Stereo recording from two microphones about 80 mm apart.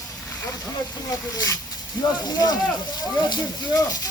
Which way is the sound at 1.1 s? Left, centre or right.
Left.